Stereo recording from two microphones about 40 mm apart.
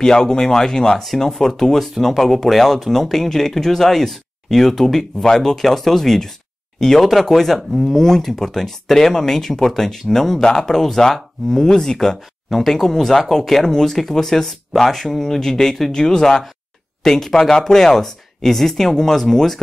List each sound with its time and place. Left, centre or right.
0.0 s speech: centre
12.4 s speech: centre
13.3 s speech: centre